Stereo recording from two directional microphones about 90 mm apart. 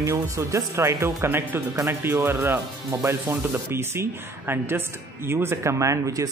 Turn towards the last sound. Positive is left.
turn(degrees=-35)  # may be behind; listen again after turning